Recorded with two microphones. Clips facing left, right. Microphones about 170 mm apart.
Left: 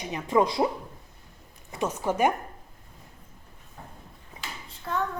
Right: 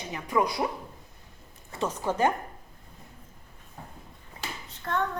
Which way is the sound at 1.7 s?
10° left (ahead or behind).